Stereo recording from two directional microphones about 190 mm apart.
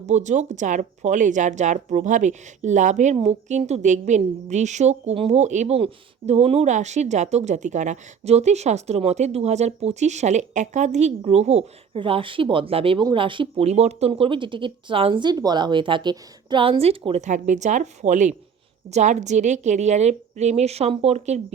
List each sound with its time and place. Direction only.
0.1 s a woman's voice: 40° right (ahead or behind)